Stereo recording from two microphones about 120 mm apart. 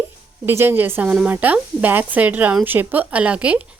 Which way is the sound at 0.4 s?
20° right (ahead or behind).